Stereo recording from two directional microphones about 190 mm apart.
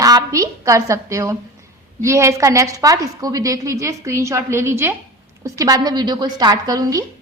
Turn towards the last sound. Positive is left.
turn(degrees=-20)  # may be behind; listen again after turning